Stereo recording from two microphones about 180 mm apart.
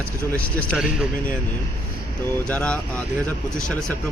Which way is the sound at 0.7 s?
5° right (ahead or behind).